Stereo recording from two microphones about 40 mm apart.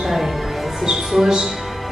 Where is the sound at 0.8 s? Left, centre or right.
Centre.